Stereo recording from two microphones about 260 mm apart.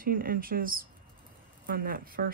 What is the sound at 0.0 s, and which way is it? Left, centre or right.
Speech, right.